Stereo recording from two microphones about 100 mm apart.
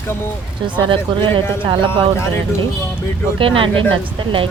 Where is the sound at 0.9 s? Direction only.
60° right (ahead or behind).